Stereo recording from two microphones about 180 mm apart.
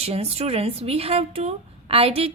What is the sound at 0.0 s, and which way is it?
Speech, 35° right (ahead or behind).